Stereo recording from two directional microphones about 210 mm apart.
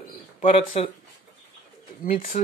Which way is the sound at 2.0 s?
40° left (ahead or behind).